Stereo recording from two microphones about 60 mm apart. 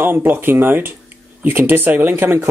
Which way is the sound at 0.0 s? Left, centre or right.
Right.